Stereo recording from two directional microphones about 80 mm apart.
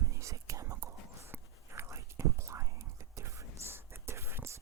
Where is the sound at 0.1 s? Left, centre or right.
Right.